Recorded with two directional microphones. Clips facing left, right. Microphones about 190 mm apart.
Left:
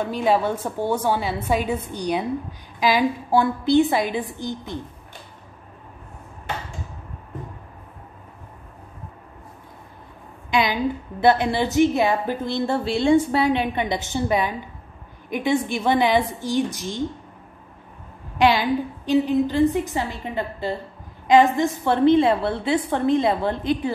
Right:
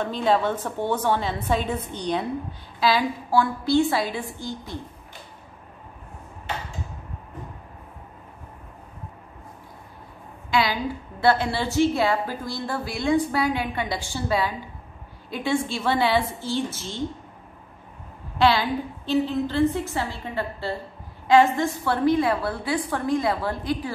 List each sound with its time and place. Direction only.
0.0 s a woman's voice: 10° left (ahead or behind)
10.5 s a woman's voice: 20° left (ahead or behind)
18.4 s a woman's voice: 15° left (ahead or behind)